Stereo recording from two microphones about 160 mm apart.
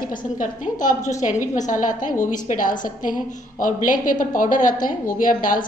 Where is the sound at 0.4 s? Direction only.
55° left (ahead or behind).